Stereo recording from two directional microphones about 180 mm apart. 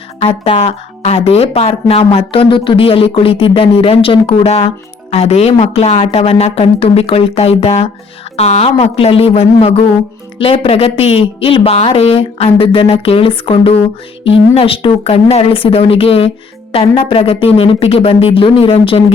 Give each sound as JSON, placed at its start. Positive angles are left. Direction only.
{"t": 0.2, "sound": "speech", "side_deg": 30}